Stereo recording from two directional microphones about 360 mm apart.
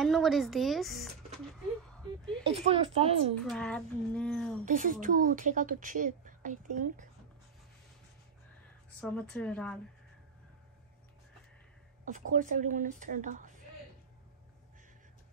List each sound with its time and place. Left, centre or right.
0.0 s speech: centre
2.4 s a woman's voice: centre
3.4 s speech: centre
4.6 s a woman's voice: right
9.0 s speech: centre
12.1 s a woman's voice: right